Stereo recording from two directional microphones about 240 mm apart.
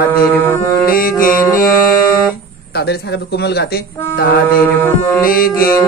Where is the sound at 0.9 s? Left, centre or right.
Left.